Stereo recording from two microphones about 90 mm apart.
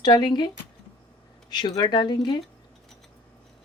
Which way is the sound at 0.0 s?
55° left (ahead or behind).